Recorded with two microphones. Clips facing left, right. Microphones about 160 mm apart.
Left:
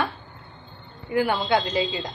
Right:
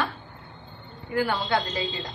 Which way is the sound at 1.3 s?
10° left (ahead or behind).